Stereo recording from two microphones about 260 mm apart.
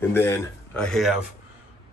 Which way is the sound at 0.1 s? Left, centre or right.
Centre.